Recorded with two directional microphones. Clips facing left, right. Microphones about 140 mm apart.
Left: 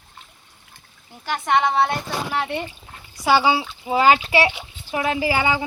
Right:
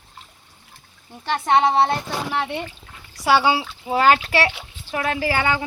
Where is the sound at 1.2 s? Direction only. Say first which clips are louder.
Right 2 dB; 30° right (ahead or behind).